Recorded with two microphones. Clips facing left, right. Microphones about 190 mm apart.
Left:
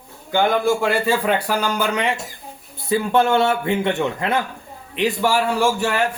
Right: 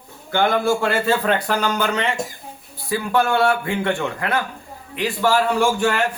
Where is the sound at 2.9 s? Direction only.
25° left (ahead or behind).